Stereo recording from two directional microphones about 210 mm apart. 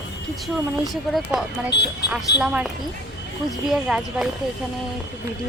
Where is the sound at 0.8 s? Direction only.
Centre (ahead or behind).